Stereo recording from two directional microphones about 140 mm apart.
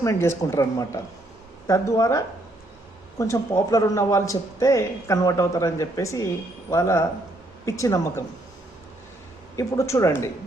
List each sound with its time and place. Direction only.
0.0 s a man's voice: 20° left (ahead or behind)
9.6 s a man's voice: 20° left (ahead or behind)